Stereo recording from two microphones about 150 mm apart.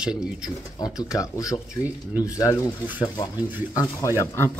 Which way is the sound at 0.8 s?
20° left (ahead or behind).